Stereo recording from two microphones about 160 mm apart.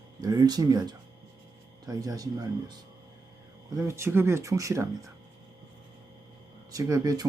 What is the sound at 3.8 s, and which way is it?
Speech, 15° right (ahead or behind).